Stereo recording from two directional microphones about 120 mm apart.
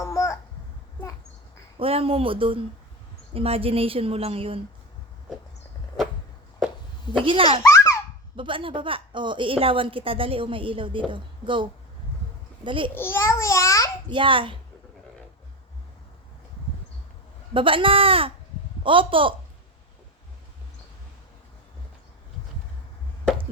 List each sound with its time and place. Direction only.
0.0 s a sound: 25° left (ahead or behind)
1.8 s a woman's voice: 50° right (ahead or behind)
7.1 s a woman's voice: 45° right (ahead or behind)
12.9 s a child's voice: 20° left (ahead or behind)
14.1 s a woman's voice: 45° right (ahead or behind)
17.5 s a woman's voice: 45° right (ahead or behind)